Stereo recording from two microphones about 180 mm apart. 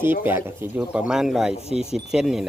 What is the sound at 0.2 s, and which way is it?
Speech, 10° right (ahead or behind).